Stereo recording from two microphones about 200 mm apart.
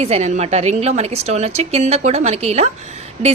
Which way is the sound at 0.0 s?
35° right (ahead or behind).